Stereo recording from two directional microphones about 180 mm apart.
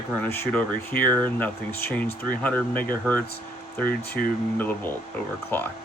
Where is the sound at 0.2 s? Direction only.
10° left (ahead or behind).